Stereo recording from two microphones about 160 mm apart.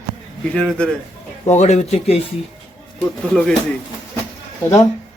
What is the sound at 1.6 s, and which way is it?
Speech, 45° left (ahead or behind).